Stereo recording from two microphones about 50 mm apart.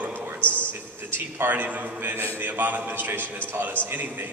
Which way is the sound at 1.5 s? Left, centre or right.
Right.